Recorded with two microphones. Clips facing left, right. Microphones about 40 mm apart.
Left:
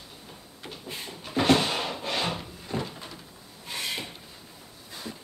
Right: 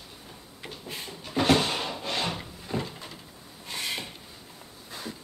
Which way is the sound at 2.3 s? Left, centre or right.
Centre.